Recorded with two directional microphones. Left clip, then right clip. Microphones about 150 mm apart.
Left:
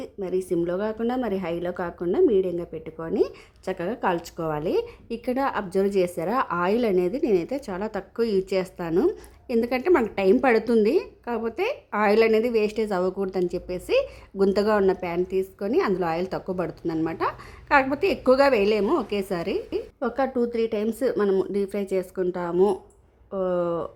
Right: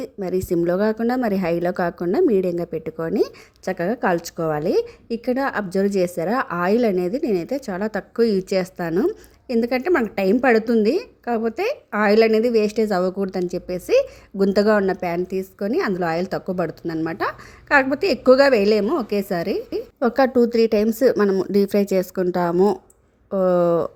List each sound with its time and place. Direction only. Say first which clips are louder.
0.0 s a woman's voice: right 3 dB; 25° right (ahead or behind)
22.5 s speech: right 1 dB; 10° right (ahead or behind)
23.3 s speech: right 8 dB; 30° right (ahead or behind)